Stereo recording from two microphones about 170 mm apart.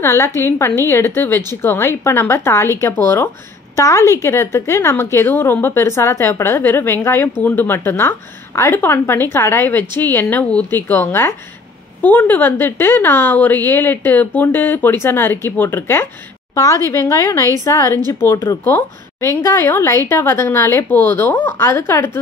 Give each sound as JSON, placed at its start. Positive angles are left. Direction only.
{"t": 0.0, "sound": "a woman's voice", "side_deg": 15}